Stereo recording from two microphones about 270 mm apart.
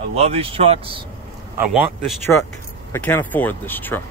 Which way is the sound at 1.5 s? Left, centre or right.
Centre.